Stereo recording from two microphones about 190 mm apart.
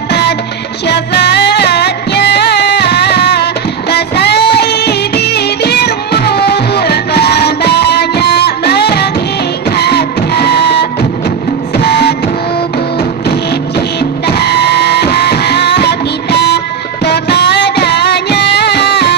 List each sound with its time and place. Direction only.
0.1 s music: 60° left (ahead or behind)
11.7 s printer: 55° left (ahead or behind)
13.3 s music: 55° left (ahead or behind)